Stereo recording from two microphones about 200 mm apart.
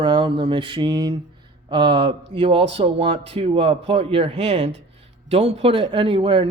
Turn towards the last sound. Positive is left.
turn(degrees=-25)  # may be behind; listen again after turning